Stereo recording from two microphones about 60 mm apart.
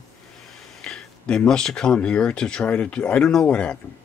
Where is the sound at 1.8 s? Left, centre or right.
Centre.